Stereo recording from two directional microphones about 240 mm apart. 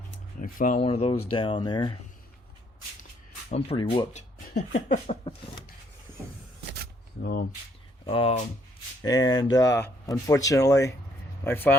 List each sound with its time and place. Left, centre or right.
0.3 s speech: left; by 2.0 s centre
3.5 s speech: left
8.0 s speech: left